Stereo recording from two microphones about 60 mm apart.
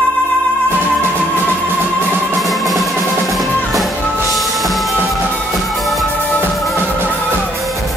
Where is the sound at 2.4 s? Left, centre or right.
Centre.